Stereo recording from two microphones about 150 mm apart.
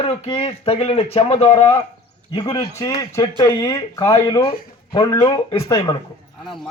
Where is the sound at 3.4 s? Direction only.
20° left (ahead or behind).